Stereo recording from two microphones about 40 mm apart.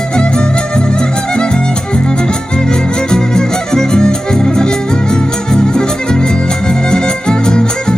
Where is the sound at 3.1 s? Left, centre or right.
Centre.